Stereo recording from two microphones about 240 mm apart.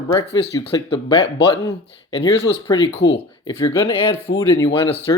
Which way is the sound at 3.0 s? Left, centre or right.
Left.